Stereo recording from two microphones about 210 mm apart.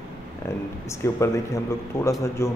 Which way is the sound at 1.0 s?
15° left (ahead or behind).